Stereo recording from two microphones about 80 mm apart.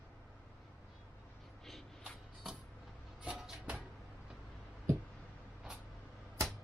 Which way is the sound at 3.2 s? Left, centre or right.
Centre.